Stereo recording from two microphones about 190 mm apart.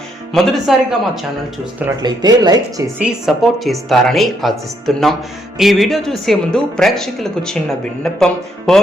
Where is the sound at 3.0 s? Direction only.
Centre (ahead or behind).